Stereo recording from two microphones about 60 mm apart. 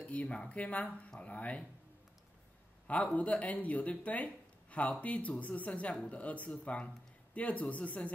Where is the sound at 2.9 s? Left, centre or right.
Left.